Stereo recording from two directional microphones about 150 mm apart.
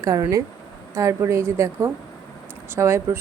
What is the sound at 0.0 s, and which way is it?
A woman's voice, 25° right (ahead or behind).